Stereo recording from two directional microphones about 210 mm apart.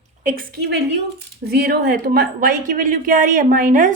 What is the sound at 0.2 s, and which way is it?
A woman's voice, 40° right (ahead or behind).